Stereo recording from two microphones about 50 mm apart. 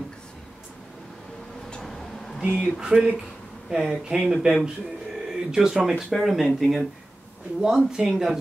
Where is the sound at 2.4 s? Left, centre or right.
Centre.